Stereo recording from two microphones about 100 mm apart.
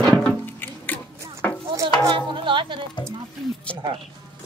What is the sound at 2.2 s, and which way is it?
Music, 55° right (ahead or behind).